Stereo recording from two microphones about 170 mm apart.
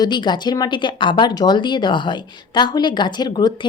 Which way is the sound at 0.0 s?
25° left (ahead or behind).